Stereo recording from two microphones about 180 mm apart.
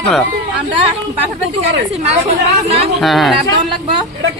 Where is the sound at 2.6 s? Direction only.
35° right (ahead or behind).